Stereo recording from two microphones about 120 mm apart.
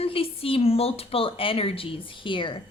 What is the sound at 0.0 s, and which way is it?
A woman's voice, 50° left (ahead or behind).